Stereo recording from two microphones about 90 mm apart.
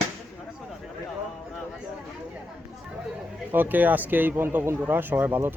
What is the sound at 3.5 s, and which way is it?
Speech, 20° right (ahead or behind).